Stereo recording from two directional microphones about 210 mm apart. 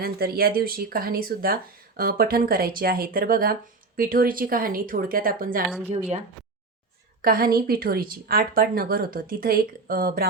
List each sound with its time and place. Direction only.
0.0 s speech: 45° right (ahead or behind)
7.2 s speech: 45° right (ahead or behind)